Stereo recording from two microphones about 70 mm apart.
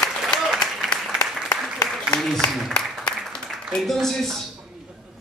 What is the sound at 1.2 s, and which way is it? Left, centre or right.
Applause, left.